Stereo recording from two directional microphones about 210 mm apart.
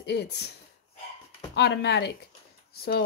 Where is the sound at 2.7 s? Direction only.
50° left (ahead or behind).